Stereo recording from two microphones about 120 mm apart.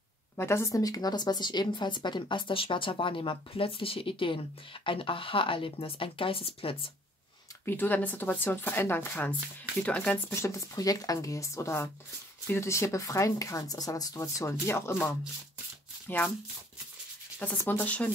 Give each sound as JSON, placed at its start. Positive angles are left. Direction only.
{"t": 0.4, "sound": "a woman's voice", "side_deg": 20}
{"t": 7.6, "sound": "speech", "side_deg": 15}
{"t": 10.3, "sound": "speech", "side_deg": 25}
{"t": 17.4, "sound": "speech", "side_deg": 15}